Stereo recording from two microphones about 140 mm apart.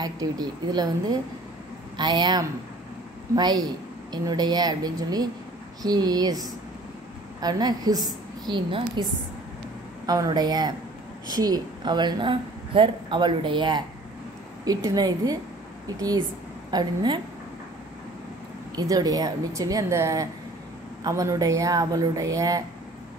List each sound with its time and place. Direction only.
0.0 s a woman's voice: 30° right (ahead or behind)
7.4 s a woman's voice: 30° right (ahead or behind)
10.0 s a woman's voice: 30° right (ahead or behind)
18.8 s a woman's voice: 25° right (ahead or behind)